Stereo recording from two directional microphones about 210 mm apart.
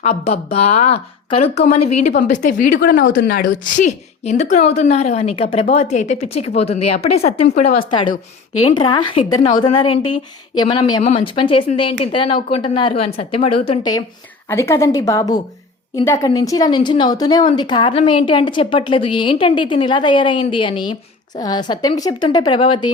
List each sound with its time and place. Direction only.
0.1 s a woman's voice: 30° left (ahead or behind)